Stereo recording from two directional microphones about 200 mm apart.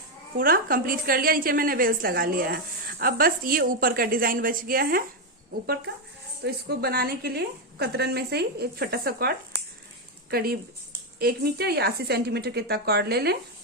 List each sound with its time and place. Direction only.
0.3 s a woman's voice: 45° right (ahead or behind)